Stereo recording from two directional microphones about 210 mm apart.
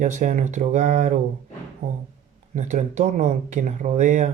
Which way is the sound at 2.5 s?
35° right (ahead or behind).